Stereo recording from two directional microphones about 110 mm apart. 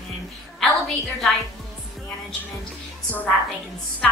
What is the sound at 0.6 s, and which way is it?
Speech, centre (ahead or behind).